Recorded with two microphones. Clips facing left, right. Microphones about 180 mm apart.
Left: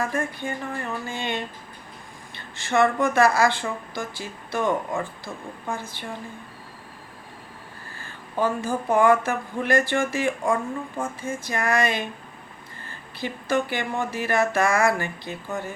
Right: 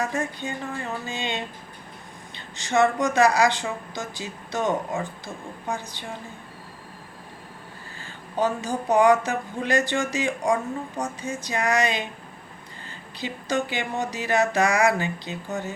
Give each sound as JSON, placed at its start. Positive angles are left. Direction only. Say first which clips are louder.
{"t": 0.0, "sound": "a woman's voice", "louder": "left 1 dB", "side_deg": -20}
{"t": 7.9, "sound": "a sound", "louder": "even", "side_deg": -20}
{"t": 10.1, "sound": "a woman's voice", "louder": "even", "side_deg": -20}